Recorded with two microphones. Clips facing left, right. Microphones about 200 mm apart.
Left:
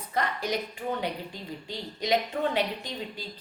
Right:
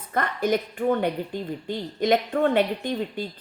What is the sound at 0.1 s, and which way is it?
A woman's voice, 55° right (ahead or behind).